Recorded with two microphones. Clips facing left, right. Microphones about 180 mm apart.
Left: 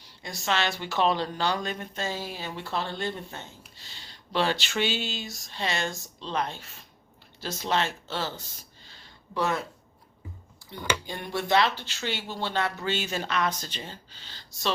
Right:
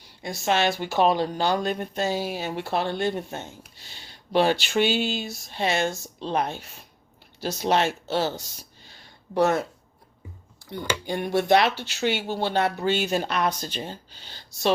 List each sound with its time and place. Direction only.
0.2 s speech: 50° right (ahead or behind)
9.3 s speech: 45° right (ahead or behind)
10.7 s speech: 60° right (ahead or behind)